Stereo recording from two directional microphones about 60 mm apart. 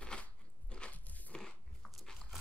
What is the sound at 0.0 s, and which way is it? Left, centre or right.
Biting, centre.